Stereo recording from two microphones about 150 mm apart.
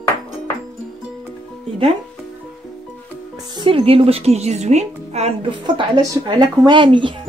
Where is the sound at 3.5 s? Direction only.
30° right (ahead or behind).